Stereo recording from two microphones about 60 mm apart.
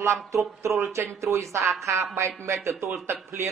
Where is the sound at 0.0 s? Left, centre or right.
Right.